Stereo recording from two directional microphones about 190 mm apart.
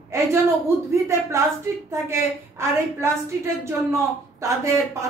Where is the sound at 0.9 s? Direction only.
15° right (ahead or behind).